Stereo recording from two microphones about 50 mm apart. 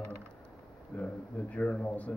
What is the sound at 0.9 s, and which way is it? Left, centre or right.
Speech, left.